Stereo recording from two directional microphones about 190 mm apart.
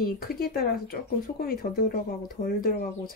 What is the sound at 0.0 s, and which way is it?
Speech, 50° left (ahead or behind).